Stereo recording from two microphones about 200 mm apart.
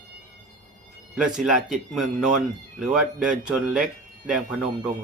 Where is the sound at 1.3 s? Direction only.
Centre (ahead or behind).